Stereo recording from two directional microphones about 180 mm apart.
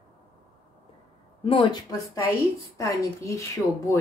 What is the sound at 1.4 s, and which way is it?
Speech, 30° left (ahead or behind).